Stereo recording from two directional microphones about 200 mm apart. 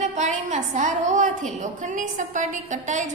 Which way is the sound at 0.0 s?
35° right (ahead or behind).